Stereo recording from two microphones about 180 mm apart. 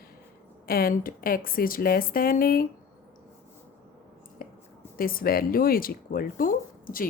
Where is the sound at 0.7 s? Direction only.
55° left (ahead or behind).